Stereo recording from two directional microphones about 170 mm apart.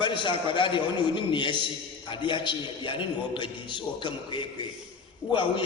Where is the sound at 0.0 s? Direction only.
30° left (ahead or behind).